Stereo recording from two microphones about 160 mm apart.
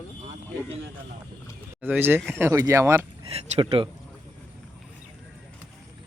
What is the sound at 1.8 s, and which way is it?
Speech, 10° right (ahead or behind).